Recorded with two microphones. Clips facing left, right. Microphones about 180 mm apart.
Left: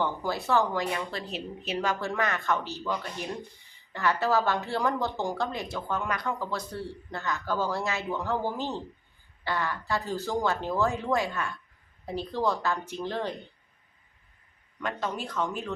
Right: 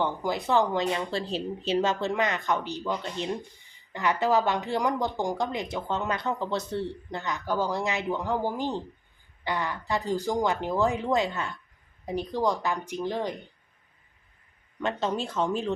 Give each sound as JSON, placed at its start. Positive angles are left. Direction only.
{"t": 0.0, "sound": "a woman's voice", "side_deg": -15}
{"t": 14.8, "sound": "speech", "side_deg": -25}